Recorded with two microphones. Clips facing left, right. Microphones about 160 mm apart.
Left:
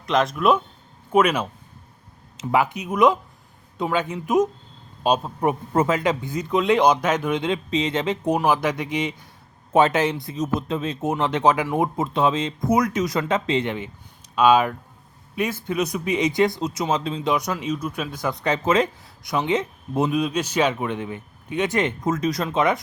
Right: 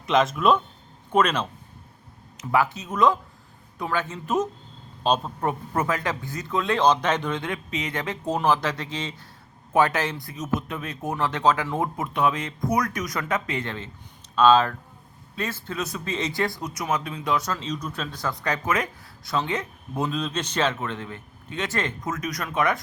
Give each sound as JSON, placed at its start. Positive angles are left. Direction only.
{"t": 0.0, "sound": "speech", "side_deg": 0}
{"t": 2.4, "sound": "speech", "side_deg": 20}
{"t": 5.7, "sound": "speech", "side_deg": 20}
{"t": 12.0, "sound": "speech", "side_deg": 25}
{"t": 19.2, "sound": "speech", "side_deg": 15}
{"t": 22.1, "sound": "speech", "side_deg": 30}